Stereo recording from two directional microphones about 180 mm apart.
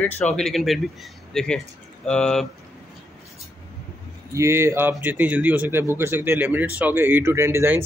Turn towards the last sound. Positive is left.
turn(degrees=-15)  # may be behind; listen again after turning